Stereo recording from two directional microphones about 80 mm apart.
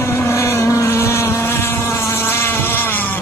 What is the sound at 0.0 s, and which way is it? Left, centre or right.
Motorboat, left.